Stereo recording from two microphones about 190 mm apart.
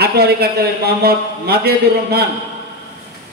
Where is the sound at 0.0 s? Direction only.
55° right (ahead or behind).